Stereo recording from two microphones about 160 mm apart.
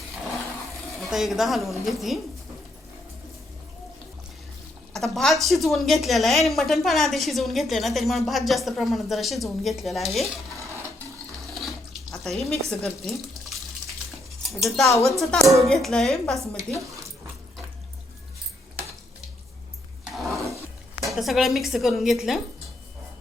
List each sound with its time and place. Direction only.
0.9 s a woman's voice: centre (ahead or behind)
4.9 s a woman's voice: centre (ahead or behind)
11.4 s water: centre (ahead or behind)
12.2 s a woman's voice: centre (ahead or behind)
16.6 s speech: 20° right (ahead or behind)
20.1 s a sound: centre (ahead or behind)
21.0 s a woman's voice: centre (ahead or behind)